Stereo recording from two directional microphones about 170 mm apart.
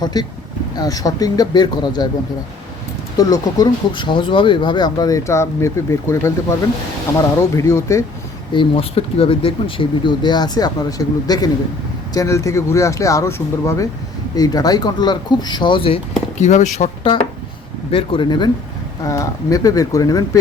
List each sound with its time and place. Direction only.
0.0 s speech: 25° left (ahead or behind)
3.2 s speech: 20° left (ahead or behind)
7.5 s speech: 15° left (ahead or behind)
8.5 s speech: 35° left (ahead or behind)
16.4 s speech: 45° left (ahead or behind); by 20.4 s 20° left (ahead or behind)